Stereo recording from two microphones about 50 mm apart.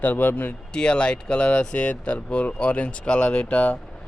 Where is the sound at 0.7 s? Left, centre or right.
Centre.